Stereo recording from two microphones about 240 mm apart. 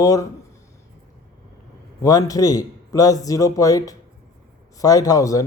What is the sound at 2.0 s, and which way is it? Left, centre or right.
A man's voice, centre.